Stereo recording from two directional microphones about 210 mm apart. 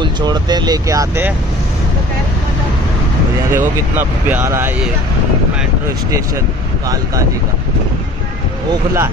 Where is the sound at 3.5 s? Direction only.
10° right (ahead or behind).